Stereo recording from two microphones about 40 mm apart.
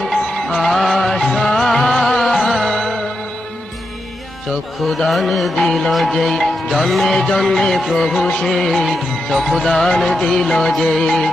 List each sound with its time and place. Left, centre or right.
0.0 s music: centre
4.8 s music: centre